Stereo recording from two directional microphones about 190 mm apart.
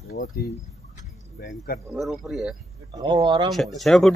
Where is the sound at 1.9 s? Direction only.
Centre (ahead or behind).